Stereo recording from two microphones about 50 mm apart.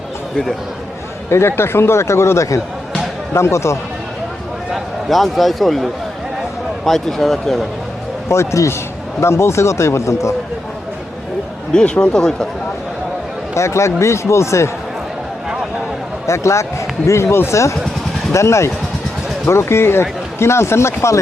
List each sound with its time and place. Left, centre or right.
1.3 s speech: left
5.0 s a man's voice: centre
8.3 s speech: left
11.7 s speech: centre
13.5 s speech: left
16.2 s speech: left
17.1 s speech: left
17.5 s speech: left
18.3 s speech: left
19.5 s speech: left